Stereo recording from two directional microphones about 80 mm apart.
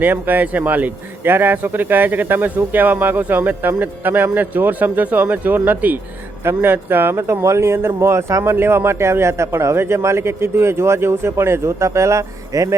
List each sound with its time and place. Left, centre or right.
0.0 s speech: right